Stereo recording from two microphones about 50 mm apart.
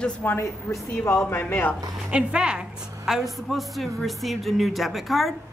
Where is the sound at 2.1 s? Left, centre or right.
Centre.